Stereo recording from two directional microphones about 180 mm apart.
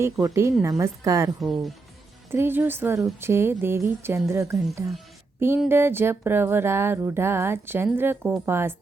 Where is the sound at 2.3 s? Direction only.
10° right (ahead or behind).